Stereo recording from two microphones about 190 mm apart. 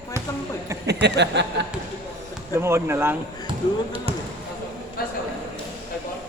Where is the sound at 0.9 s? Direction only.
65° right (ahead or behind).